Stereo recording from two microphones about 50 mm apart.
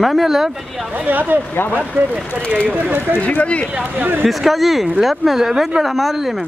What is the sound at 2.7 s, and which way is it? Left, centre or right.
Speech, right.